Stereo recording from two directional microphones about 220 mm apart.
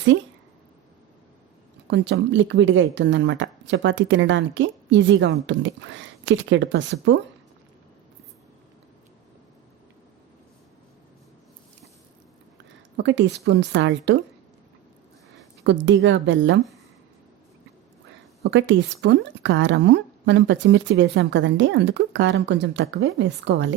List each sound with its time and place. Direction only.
1.9 s speech: 50° right (ahead or behind)
13.0 s a woman's voice: 55° right (ahead or behind)
15.6 s speech: 55° right (ahead or behind)
18.4 s speech: 55° right (ahead or behind)